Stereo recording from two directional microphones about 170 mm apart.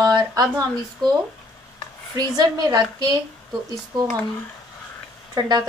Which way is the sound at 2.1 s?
25° right (ahead or behind).